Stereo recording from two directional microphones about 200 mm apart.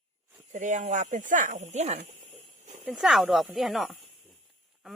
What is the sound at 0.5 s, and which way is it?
Speech, 40° right (ahead or behind).